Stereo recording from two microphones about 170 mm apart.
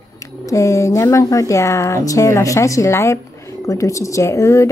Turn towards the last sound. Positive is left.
turn(degrees=15)  # may be behind; listen again after turning